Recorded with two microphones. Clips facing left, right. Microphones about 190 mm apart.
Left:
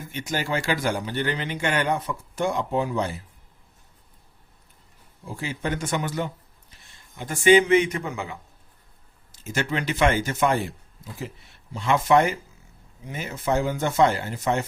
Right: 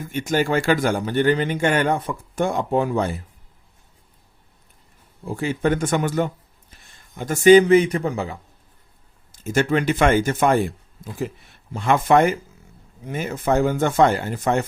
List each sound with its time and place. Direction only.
0.1 s speech: 50° right (ahead or behind)
5.4 s a man's voice: 50° right (ahead or behind); by 8.4 s 35° right (ahead or behind)
9.3 s speech: 50° right (ahead or behind)